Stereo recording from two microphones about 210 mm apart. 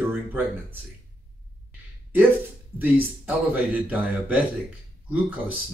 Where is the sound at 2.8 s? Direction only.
10° right (ahead or behind).